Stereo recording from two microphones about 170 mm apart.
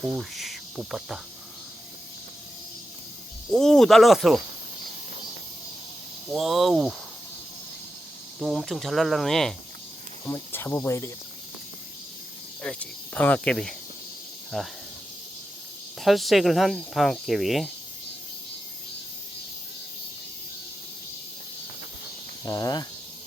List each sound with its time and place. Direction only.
0.0 s cricket: centre (ahead or behind)
3.5 s speech: 5° left (ahead or behind)
6.3 s speech: centre (ahead or behind)
8.4 s speech: centre (ahead or behind)
10.2 s speech: 15° left (ahead or behind)
12.6 s speech: 10° left (ahead or behind)
16.0 s speech: centre (ahead or behind)
22.4 s speech: 20° left (ahead or behind)